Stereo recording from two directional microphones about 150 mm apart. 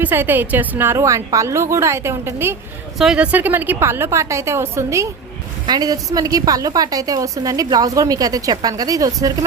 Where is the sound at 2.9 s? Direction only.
5° right (ahead or behind).